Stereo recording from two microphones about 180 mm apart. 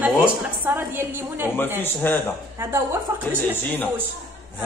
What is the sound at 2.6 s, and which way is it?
Speech, 15° right (ahead or behind).